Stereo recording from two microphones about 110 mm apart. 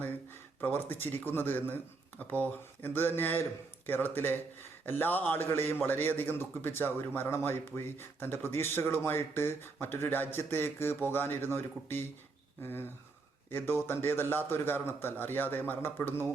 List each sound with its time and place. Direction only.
0.6 s speech: 20° left (ahead or behind)